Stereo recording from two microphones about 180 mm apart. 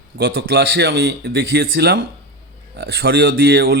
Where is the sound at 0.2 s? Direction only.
60° right (ahead or behind).